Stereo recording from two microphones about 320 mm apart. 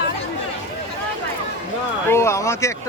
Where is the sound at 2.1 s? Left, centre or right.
Centre.